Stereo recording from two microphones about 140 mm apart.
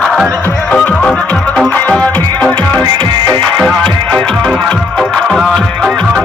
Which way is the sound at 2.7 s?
30° right (ahead or behind).